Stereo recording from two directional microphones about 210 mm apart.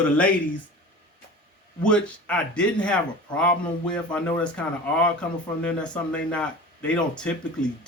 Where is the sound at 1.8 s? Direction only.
5° left (ahead or behind).